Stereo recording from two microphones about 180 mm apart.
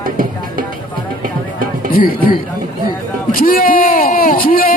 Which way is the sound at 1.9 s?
55° left (ahead or behind).